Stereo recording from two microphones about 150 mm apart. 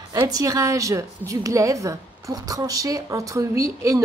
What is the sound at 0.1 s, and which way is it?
A woman's voice, 25° right (ahead or behind).